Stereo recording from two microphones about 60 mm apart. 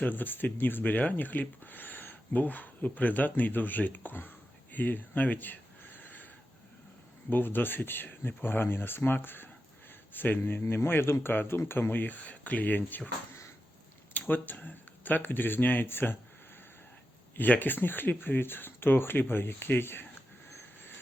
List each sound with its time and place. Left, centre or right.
0.0 s speech: left
4.7 s a sound: left
7.3 s speech: left
14.1 s speech: left
17.3 s speech: left